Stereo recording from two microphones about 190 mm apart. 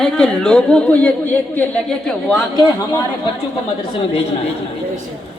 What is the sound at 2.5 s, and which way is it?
Speech, 20° left (ahead or behind).